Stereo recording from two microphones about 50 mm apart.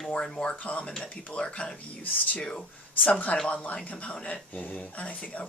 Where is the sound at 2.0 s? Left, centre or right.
Left.